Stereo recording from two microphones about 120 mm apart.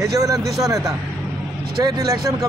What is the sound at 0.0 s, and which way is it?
Speech, 25° right (ahead or behind).